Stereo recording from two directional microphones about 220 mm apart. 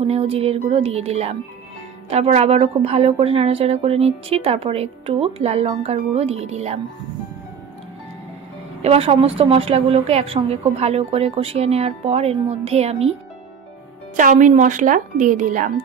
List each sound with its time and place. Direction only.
0.0 s a woman's voice: 25° right (ahead or behind)
8.8 s a woman's voice: 25° right (ahead or behind)
14.1 s speech: 35° right (ahead or behind)